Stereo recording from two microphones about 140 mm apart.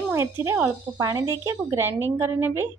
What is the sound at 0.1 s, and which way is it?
A woman's voice, 20° right (ahead or behind).